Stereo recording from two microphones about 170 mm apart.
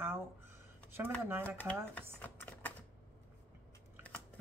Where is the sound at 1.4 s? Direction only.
10° left (ahead or behind).